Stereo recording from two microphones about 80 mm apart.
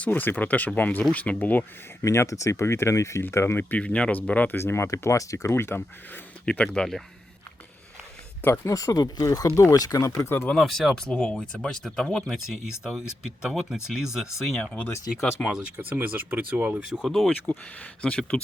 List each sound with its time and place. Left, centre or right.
0.0 s speech: left
2.0 s speech: left; by 4.5 s centre
4.5 s speech: left
6.4 s speech: centre
8.4 s speech: left
8.7 s speech: left
10.5 s speech: centre
13.4 s speech: centre
14.6 s speech: centre
15.4 s speech: centre
15.8 s speech: right
17.1 s speech: centre